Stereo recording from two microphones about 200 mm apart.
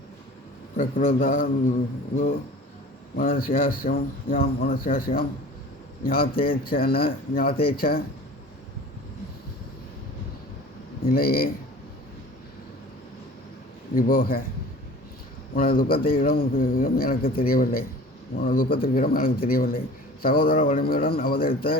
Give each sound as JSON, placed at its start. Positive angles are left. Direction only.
{"t": 0.8, "sound": "a man's voice", "side_deg": 40}
{"t": 3.2, "sound": "a man's voice", "side_deg": 45}
{"t": 11.0, "sound": "speech", "side_deg": 50}
{"t": 13.9, "sound": "a man's voice", "side_deg": 45}
{"t": 15.5, "sound": "a man's voice", "side_deg": 45}